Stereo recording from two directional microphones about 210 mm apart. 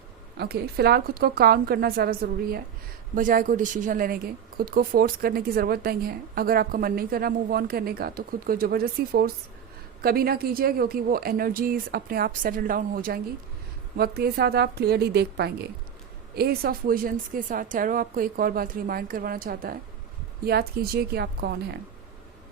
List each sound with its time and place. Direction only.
0.3 s speech: 50° right (ahead or behind)